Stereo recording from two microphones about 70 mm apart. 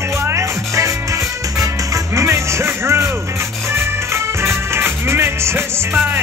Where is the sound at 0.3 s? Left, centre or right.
Right.